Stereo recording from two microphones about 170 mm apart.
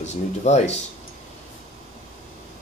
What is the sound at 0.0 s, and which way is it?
Speech, 40° left (ahead or behind).